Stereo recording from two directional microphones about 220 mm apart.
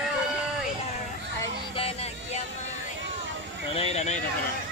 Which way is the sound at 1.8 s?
25° left (ahead or behind).